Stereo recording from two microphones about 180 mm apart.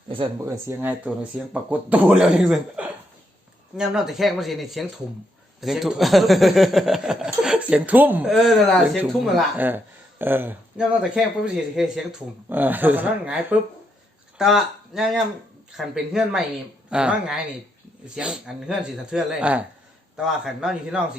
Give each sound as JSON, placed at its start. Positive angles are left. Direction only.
{"t": 0.1, "sound": "speech", "side_deg": -30}
{"t": 0.5, "sound": "speech", "side_deg": -10}
{"t": 16.9, "sound": "speech", "side_deg": -5}